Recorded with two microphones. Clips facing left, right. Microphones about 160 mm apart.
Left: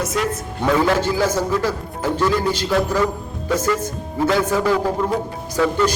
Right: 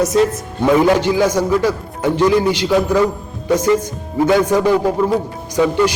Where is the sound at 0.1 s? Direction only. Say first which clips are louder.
Right 8 dB; 30° right (ahead or behind).